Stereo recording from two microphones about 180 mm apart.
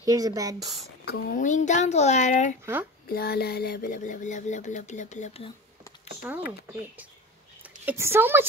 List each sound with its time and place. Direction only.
0.0 s speech: 20° right (ahead or behind)
1.0 s speech: 50° left (ahead or behind)
2.6 s speech: 10° right (ahead or behind)
3.1 s speech: 60° left (ahead or behind); by 5.5 s 35° left (ahead or behind)
7.6 s a woman's voice: 10° right (ahead or behind)